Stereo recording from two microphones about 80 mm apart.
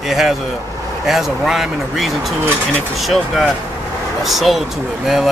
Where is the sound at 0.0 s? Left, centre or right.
Centre.